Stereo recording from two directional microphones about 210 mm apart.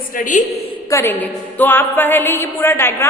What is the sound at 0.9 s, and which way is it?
A woman's voice, 10° left (ahead or behind).